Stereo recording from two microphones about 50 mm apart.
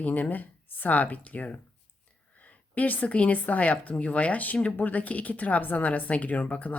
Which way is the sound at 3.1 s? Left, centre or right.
Left.